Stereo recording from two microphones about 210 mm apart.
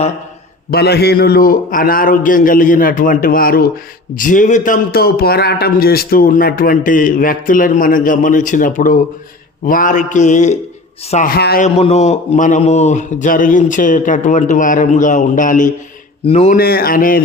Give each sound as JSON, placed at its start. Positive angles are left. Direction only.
{"t": 0.7, "sound": "a man's voice", "side_deg": 50}
{"t": 11.6, "sound": "a man's voice", "side_deg": 30}
{"t": 16.6, "sound": "a man's voice", "side_deg": 45}